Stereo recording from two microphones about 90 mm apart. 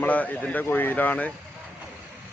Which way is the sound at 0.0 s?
15° left (ahead or behind).